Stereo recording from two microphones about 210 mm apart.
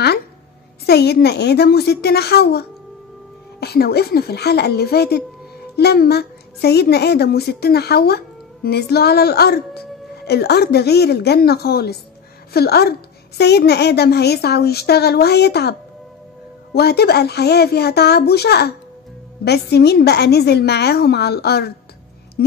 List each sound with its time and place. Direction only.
0.8 s speech: 50° left (ahead or behind)
16.7 s speech: 50° left (ahead or behind)